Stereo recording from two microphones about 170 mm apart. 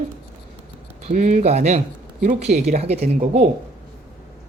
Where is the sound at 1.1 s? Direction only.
40° right (ahead or behind).